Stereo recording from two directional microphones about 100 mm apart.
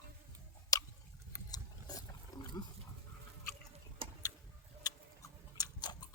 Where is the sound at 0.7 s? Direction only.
40° left (ahead or behind).